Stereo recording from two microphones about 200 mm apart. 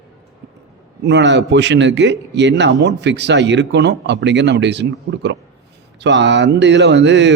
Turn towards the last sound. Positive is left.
turn(degrees=-60)  # may be behind; listen again after turning